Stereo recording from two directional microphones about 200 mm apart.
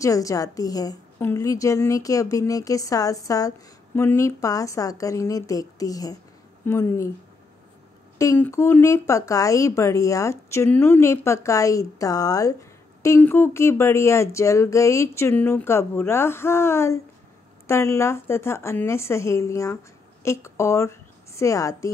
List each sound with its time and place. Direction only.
0.0 s a woman's voice: 15° left (ahead or behind)
8.2 s a woman's voice: 15° left (ahead or behind)